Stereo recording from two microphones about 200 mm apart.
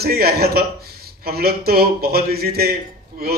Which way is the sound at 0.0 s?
50° right (ahead or behind).